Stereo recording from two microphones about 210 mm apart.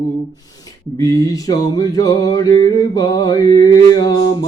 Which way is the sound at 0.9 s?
15° left (ahead or behind).